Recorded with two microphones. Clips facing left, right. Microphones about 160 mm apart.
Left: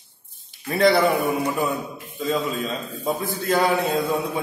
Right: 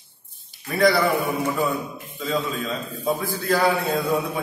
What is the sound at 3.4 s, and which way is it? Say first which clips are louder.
Speech: left 1 dB; 20° left (ahead or behind).